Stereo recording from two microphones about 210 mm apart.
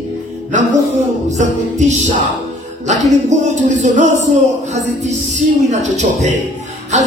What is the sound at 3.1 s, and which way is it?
A man's voice, 35° right (ahead or behind).